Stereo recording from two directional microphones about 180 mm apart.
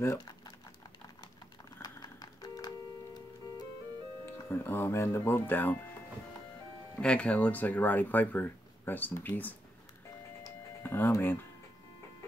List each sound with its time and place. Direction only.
0.0 s speech: 15° left (ahead or behind)
1.8 s typing: 20° left (ahead or behind)
4.3 s speech: 10° left (ahead or behind)
7.0 s speech: 5° left (ahead or behind)
10.4 s music: 10° left (ahead or behind)